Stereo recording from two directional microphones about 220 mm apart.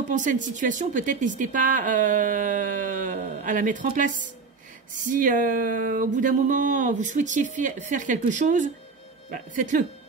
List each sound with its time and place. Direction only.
0.1 s speech: 35° right (ahead or behind)